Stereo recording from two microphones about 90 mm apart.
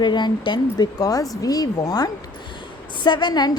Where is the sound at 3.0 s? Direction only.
55° left (ahead or behind).